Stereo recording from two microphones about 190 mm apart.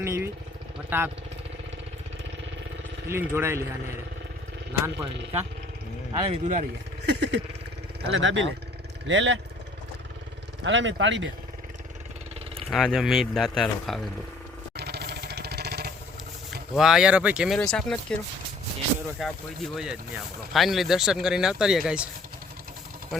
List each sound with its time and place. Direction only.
0.0 s speech: 15° right (ahead or behind)
3.1 s speech: 15° right (ahead or behind)
6.1 s speech: 30° right (ahead or behind)
7.0 s speech: 65° right (ahead or behind)
10.6 s speech: 75° right (ahead or behind)
12.7 s speech: centre (ahead or behind)
14.8 s jackhammer: 60° right (ahead or behind)
16.7 s speech: 5° right (ahead or behind)
19.2 s speech: centre (ahead or behind)